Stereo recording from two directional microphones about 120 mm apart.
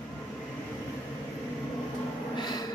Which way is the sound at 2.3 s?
35° left (ahead or behind).